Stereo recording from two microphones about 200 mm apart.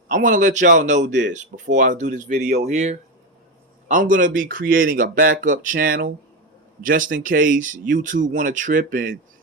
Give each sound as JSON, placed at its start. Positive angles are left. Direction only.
{"t": 0.1, "sound": "speech", "side_deg": -40}
{"t": 1.0, "sound": "speech", "side_deg": -60}
{"t": 1.6, "sound": "speech", "side_deg": -40}